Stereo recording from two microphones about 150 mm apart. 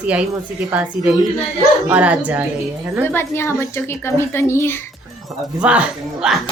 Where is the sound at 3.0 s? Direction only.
15° left (ahead or behind).